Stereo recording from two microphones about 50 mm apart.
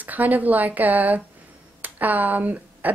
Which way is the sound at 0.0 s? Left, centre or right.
Right.